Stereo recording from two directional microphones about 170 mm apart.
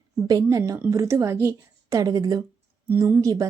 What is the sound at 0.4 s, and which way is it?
Speech, 20° right (ahead or behind).